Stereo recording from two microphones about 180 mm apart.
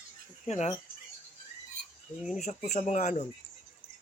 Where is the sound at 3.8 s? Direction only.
45° left (ahead or behind).